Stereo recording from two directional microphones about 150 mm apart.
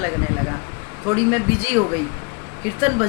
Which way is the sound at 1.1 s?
15° right (ahead or behind).